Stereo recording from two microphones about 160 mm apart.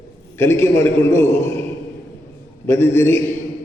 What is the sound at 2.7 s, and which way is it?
Speech, 15° left (ahead or behind).